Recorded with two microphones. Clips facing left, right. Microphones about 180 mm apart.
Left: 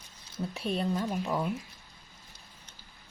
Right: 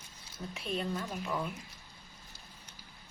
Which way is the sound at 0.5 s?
35° left (ahead or behind).